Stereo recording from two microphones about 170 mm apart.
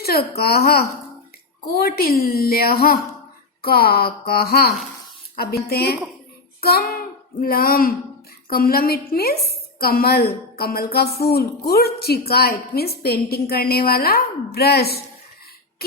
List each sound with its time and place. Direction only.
0.0 s a woman's voice: 65° left (ahead or behind)